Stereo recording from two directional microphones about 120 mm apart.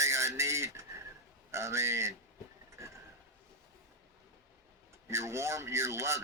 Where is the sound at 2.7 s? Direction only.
25° right (ahead or behind).